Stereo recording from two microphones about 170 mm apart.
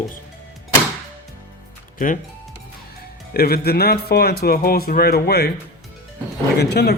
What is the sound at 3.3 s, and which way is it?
Speech, 65° left (ahead or behind).